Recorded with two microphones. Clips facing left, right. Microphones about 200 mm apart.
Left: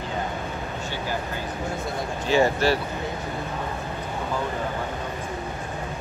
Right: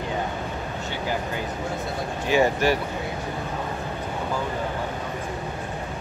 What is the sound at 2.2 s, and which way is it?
Speech, 15° right (ahead or behind).